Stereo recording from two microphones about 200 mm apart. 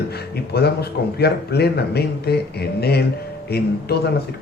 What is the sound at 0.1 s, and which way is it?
A man's voice, 55° left (ahead or behind).